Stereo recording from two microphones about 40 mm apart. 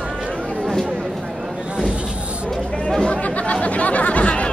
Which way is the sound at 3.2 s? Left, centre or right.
Left.